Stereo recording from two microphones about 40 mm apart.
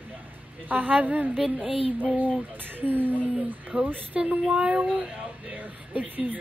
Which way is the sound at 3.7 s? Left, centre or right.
Right.